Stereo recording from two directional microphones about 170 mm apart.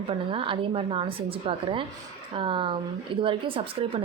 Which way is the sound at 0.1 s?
30° right (ahead or behind).